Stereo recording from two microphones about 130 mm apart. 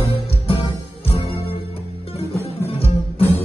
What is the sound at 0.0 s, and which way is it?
Music, 45° left (ahead or behind).